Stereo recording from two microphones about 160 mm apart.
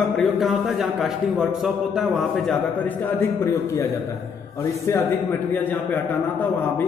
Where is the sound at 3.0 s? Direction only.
10° left (ahead or behind).